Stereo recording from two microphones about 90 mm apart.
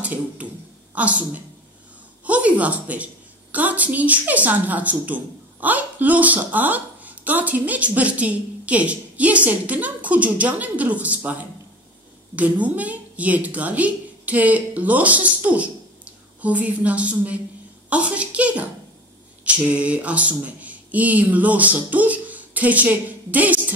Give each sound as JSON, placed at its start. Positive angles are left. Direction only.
{"t": 0.0, "sound": "a sound", "side_deg": -15}
{"t": 0.9, "sound": "a woman's voice", "side_deg": -15}
{"t": 12.4, "sound": "a woman's voice", "side_deg": -15}